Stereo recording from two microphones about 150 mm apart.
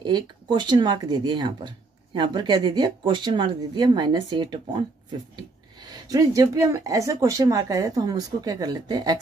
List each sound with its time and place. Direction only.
0.0 s speech: 30° right (ahead or behind)